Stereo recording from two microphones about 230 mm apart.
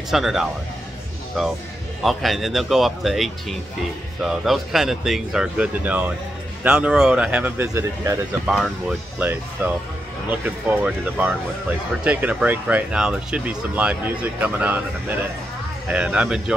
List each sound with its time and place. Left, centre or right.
0.1 s speech: centre
8.5 s speech: centre